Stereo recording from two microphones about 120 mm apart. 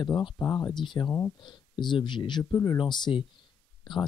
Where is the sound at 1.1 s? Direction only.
20° left (ahead or behind).